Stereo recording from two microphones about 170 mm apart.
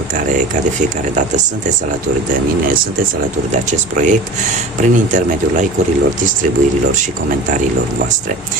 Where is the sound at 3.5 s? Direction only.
45° right (ahead or behind).